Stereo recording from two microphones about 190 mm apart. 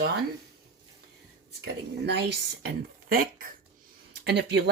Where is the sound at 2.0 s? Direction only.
65° right (ahead or behind); by 3.5 s 50° right (ahead or behind).